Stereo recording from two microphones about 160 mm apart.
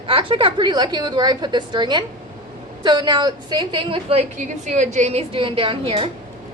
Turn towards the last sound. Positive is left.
turn(degrees=-35)  # may be behind; listen again after turning